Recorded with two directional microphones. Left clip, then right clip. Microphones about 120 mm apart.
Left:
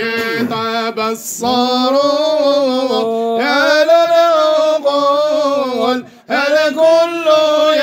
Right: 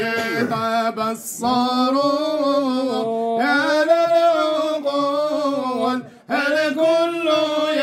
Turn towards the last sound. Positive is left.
turn(degrees=-45)  # may be behind; listen again after turning